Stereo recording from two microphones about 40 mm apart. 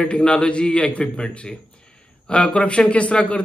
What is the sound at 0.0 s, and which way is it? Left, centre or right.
A man's voice, left.